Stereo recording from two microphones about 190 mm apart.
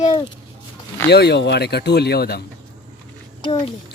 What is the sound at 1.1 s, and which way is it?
Speech, 60° left (ahead or behind).